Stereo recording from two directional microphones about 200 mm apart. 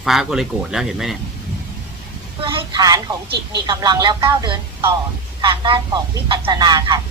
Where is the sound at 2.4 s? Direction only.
25° right (ahead or behind).